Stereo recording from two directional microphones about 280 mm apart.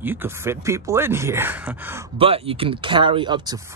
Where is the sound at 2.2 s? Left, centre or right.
Centre.